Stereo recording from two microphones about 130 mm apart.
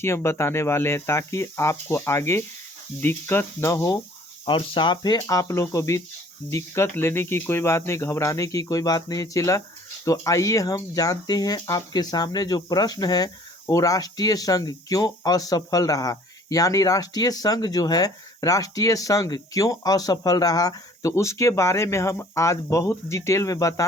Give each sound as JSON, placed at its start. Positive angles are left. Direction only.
{"t": 0.0, "sound": "speech", "side_deg": 20}
{"t": 4.4, "sound": "speech", "side_deg": 40}
{"t": 5.2, "sound": "speech", "side_deg": 25}